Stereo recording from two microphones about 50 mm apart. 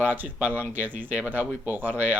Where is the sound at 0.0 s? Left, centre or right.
Right.